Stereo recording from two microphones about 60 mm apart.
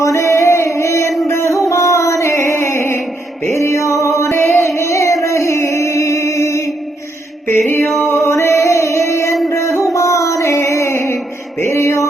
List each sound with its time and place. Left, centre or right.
0.0 s music: left
8.0 s music: left
11.6 s a sound: left